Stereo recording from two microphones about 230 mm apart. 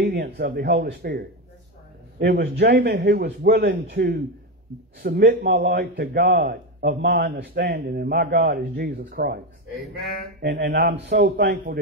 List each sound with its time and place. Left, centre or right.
0.0 s a man's voice: right
10.4 s a man's voice: right